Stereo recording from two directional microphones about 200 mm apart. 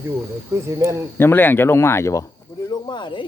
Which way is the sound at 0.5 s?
15° right (ahead or behind).